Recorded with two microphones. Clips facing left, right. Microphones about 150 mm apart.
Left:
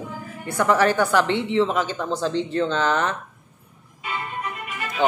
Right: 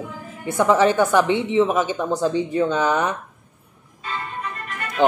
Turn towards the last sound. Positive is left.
turn(degrees=5)  # may be behind; listen again after turning